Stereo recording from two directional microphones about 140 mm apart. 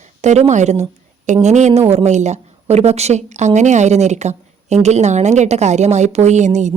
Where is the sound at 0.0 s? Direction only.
55° right (ahead or behind).